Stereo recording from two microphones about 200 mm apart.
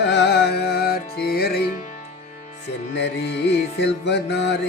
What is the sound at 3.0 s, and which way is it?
Music, 60° left (ahead or behind).